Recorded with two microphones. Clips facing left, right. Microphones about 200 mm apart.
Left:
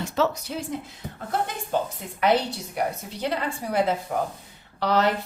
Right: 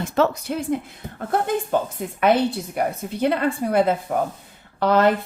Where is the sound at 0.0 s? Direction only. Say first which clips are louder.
Right 4 dB; 55° right (ahead or behind).